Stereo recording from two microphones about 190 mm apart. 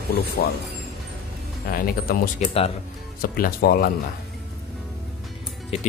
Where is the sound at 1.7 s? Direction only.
50° left (ahead or behind).